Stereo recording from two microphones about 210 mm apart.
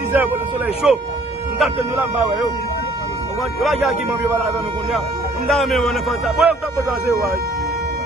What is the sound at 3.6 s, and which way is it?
Speech, centre (ahead or behind).